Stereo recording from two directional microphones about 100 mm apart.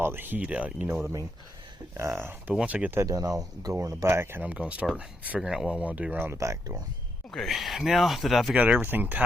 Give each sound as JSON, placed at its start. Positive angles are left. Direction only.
{"t": 0.0, "sound": "speech", "side_deg": -20}
{"t": 2.0, "sound": "speech", "side_deg": -25}
{"t": 2.5, "sound": "speech", "side_deg": -10}
{"t": 3.0, "sound": "speech", "side_deg": -35}
{"t": 5.8, "sound": "speech", "side_deg": -15}
{"t": 6.3, "sound": "speech", "side_deg": -30}
{"t": 7.3, "sound": "speech", "side_deg": 5}
{"t": 8.5, "sound": "speech", "side_deg": -15}